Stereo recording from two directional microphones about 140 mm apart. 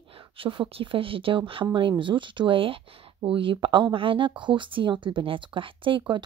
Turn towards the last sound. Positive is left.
turn(degrees=-35)  # may be behind; listen again after turning